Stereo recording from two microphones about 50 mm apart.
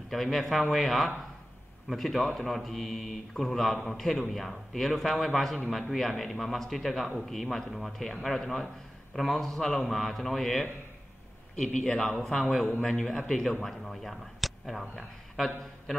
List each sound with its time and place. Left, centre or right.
0.1 s speech: centre
9.1 s a man's voice: centre
13.6 s speech: centre